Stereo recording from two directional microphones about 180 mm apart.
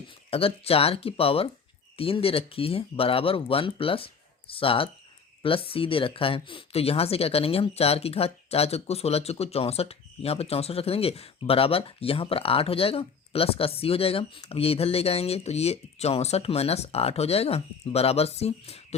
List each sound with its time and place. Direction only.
0.3 s speech: 30° left (ahead or behind)